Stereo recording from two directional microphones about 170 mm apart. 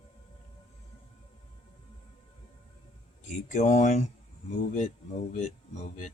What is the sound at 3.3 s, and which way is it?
Speech, 45° left (ahead or behind).